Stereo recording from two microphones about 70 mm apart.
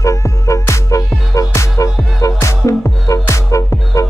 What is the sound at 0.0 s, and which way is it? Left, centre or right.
Music, left.